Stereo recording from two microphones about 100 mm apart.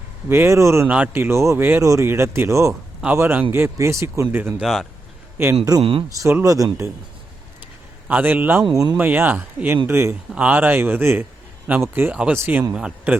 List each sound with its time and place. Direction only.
0.3 s speech: 25° right (ahead or behind)
0.9 s speech: 15° right (ahead or behind)
1.8 s speech: 35° right (ahead or behind)
4.6 s speech: centre (ahead or behind)
5.4 s speech: 25° right (ahead or behind)
5.8 s speech: 65° right (ahead or behind)
6.1 s speech: 30° right (ahead or behind)
8.0 s speech: 15° right (ahead or behind)
8.7 s speech: 40° right (ahead or behind)
9.0 s speech: 20° right (ahead or behind)
10.3 s speech: 15° right (ahead or behind)
12.1 s speech: 10° right (ahead or behind)